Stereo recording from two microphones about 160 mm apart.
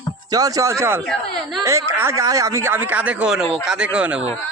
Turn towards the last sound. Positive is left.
turn(degrees=-5)  # may be behind; listen again after turning